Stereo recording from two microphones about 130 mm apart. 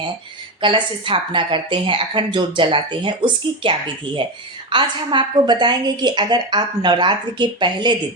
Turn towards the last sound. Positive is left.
turn(degrees=-35)  # may be behind; listen again after turning